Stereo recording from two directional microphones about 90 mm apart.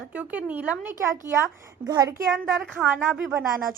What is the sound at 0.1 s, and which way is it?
Speech, 20° right (ahead or behind).